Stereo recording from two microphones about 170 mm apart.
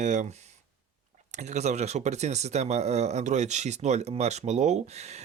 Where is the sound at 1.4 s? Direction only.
40° right (ahead or behind).